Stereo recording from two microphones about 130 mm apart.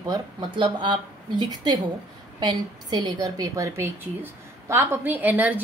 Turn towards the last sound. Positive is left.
turn(degrees=-15)  # may be behind; listen again after turning